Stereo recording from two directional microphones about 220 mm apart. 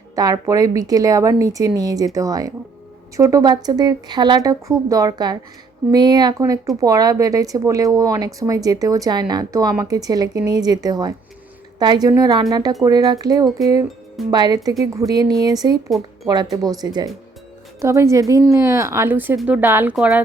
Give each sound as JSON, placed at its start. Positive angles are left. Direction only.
{"t": 0.2, "sound": "speech", "side_deg": -15}